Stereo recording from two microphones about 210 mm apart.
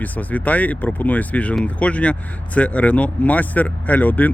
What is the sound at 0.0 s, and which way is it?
Speech, 5° left (ahead or behind).